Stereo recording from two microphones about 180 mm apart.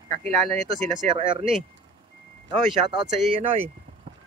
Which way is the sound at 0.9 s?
40° right (ahead or behind).